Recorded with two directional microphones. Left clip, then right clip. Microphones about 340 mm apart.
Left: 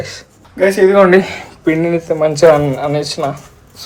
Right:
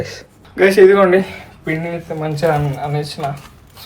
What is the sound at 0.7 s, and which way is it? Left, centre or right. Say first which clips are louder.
Speech: even; centre.